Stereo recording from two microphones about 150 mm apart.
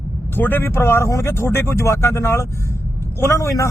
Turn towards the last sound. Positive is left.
turn(degrees=20)  # may be behind; listen again after turning